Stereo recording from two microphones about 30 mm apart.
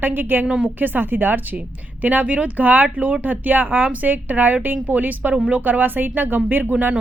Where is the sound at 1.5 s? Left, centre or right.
Right.